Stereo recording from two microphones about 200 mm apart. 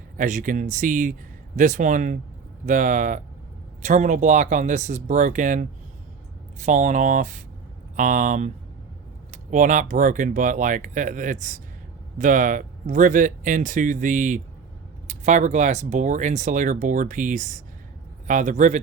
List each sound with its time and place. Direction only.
0.2 s speech: 40° right (ahead or behind)